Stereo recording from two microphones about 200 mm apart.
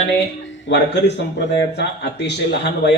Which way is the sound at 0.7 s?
60° left (ahead or behind).